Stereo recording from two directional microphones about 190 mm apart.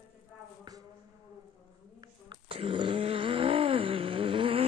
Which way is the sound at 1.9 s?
25° right (ahead or behind).